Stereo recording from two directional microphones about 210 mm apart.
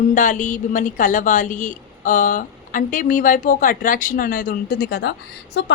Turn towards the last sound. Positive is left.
turn(degrees=55)  # may be behind; listen again after turning